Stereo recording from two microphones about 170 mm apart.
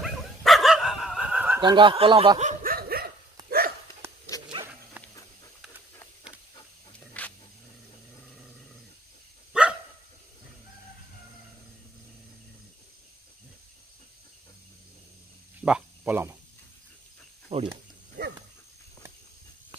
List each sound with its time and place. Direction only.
0.0 s dog: centre (ahead or behind)
1.6 s speech: 30° right (ahead or behind)
2.6 s dog: 60° right (ahead or behind)
3.4 s hiccup: 60° right (ahead or behind)
4.3 s a sound: 20° left (ahead or behind)
5.0 s dog: 10° right (ahead or behind)
7.2 s a sound: 10° left (ahead or behind)
9.5 s dog: 5° right (ahead or behind)
15.6 s cricket: 10° right (ahead or behind)
17.5 s snake: 35° right (ahead or behind)